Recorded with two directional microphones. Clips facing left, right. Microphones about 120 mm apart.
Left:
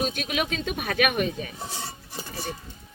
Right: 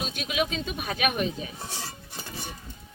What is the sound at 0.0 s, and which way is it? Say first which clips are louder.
Speech: left 2 dB; 50° left (ahead or behind).